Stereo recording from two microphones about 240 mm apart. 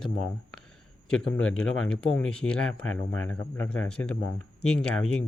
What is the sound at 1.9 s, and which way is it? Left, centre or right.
Speech, centre.